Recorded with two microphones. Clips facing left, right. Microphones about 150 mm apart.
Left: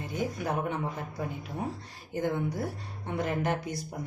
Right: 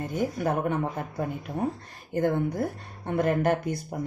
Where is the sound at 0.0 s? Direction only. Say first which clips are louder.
Right 5 dB; 50° right (ahead or behind).